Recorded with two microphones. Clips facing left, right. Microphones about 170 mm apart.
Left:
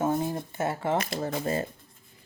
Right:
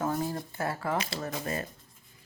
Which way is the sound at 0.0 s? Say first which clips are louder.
Left 4 dB; 25° left (ahead or behind).